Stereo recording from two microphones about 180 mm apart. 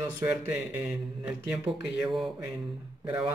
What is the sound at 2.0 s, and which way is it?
Speech, centre (ahead or behind).